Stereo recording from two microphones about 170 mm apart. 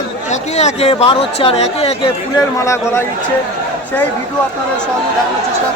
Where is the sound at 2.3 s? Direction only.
15° left (ahead or behind).